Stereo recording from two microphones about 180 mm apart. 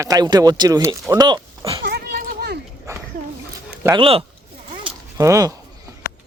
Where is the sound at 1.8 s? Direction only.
65° right (ahead or behind).